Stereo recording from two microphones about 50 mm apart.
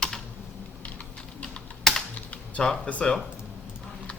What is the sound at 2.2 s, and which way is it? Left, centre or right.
Typing, left.